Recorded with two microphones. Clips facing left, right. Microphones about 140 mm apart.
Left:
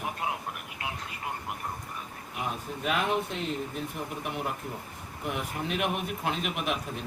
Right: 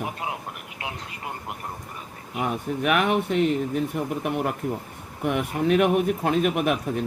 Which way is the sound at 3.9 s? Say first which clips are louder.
Right 8 dB; 55° right (ahead or behind).